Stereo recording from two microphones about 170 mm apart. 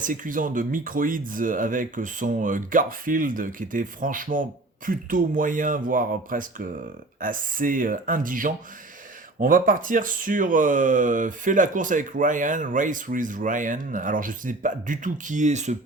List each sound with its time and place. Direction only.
0.0 s speech: 50° right (ahead or behind)